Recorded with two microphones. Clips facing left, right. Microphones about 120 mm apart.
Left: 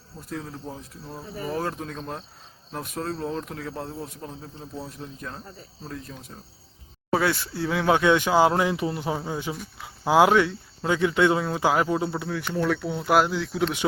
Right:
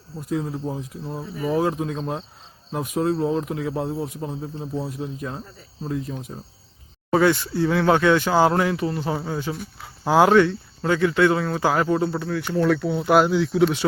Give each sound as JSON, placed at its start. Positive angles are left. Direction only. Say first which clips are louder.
{"t": 0.3, "sound": "a man's voice", "louder": "right 8 dB", "side_deg": -15}
{"t": 7.1, "sound": "speech", "louder": "right 5 dB", "side_deg": 0}
{"t": 12.6, "sound": "speech", "louder": "right 5 dB", "side_deg": 0}